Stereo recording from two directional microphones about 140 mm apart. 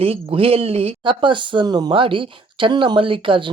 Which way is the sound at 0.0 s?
45° right (ahead or behind).